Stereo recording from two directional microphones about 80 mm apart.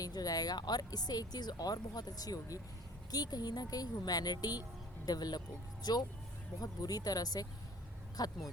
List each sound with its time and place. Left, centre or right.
0.0 s speech: left